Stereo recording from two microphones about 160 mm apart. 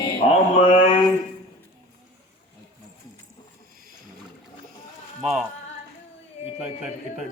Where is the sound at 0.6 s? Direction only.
45° left (ahead or behind).